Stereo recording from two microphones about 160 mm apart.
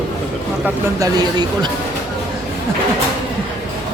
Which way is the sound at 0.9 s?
25° right (ahead or behind).